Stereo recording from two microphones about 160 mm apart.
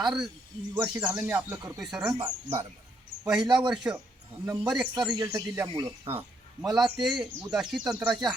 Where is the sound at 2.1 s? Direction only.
30° right (ahead or behind).